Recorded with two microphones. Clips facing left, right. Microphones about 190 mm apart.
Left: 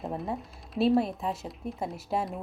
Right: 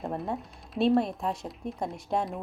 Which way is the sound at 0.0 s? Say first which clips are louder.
Right 1 dB; centre (ahead or behind).